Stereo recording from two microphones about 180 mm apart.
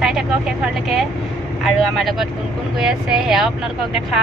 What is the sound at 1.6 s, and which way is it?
Speech, centre (ahead or behind).